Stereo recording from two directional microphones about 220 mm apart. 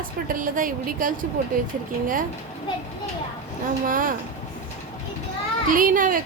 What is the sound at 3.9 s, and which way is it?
Speech, 40° right (ahead or behind).